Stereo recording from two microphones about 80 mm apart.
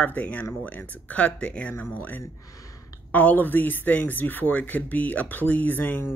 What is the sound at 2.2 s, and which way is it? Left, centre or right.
Speech, left.